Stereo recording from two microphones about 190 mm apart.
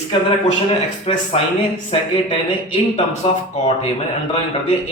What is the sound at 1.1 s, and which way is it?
Speech, 30° left (ahead or behind).